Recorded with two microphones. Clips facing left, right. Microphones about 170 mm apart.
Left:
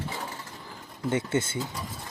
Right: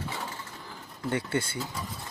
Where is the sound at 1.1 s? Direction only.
20° left (ahead or behind).